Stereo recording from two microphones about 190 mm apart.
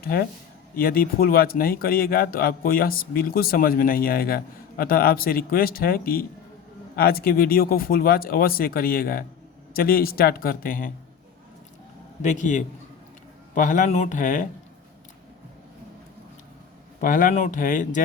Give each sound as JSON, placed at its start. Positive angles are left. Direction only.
{"t": 0.0, "sound": "speech", "side_deg": 50}
{"t": 12.2, "sound": "a man's voice", "side_deg": 40}
{"t": 17.0, "sound": "speech", "side_deg": 45}